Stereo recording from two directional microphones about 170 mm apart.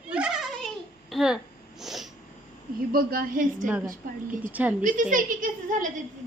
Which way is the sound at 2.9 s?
60° right (ahead or behind).